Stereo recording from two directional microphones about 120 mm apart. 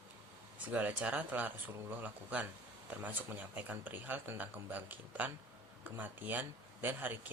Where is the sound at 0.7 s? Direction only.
15° right (ahead or behind).